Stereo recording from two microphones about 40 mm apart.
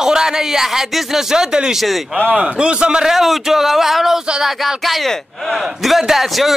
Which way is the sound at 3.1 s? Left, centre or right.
Centre.